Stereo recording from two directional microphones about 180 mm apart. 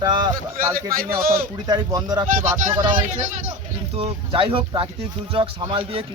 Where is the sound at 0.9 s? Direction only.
55° right (ahead or behind).